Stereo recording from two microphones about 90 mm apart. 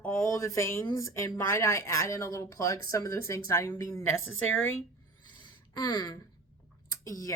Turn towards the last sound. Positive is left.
turn(degrees=35)  # may be behind; listen again after turning